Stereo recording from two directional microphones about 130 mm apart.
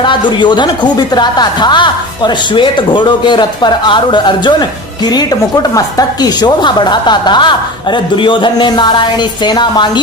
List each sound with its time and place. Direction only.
0.0 s speech: 35° left (ahead or behind)
5.7 s speech: 30° left (ahead or behind)